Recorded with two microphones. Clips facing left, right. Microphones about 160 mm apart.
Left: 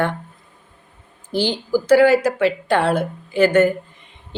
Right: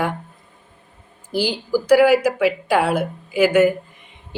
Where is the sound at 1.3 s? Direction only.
10° right (ahead or behind).